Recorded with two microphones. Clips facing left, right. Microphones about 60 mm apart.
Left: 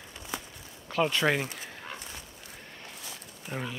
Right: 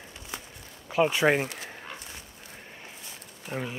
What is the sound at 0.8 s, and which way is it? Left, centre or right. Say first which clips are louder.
Speech: right 3 dB; centre.